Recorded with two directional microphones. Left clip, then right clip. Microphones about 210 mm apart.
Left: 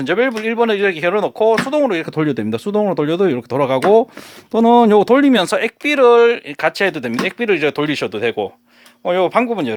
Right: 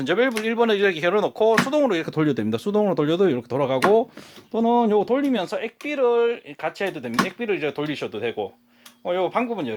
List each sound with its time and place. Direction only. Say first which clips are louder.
0.0 s speech: left 5 dB; 15° left (ahead or behind)
4.5 s speech: left 9 dB; 35° left (ahead or behind)